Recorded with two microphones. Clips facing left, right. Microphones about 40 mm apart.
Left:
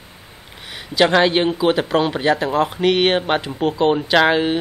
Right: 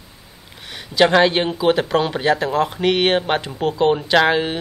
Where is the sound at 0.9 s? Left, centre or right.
Centre.